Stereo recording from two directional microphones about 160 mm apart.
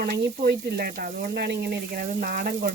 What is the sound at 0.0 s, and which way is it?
Speech, 75° right (ahead or behind).